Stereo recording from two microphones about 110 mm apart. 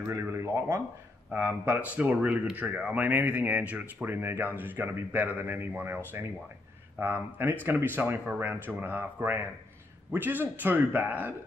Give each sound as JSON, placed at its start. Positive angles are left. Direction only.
{"t": 0.1, "sound": "a man's voice", "side_deg": -25}